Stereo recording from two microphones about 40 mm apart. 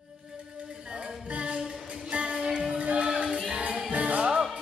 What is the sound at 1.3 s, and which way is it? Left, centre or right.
Music, right.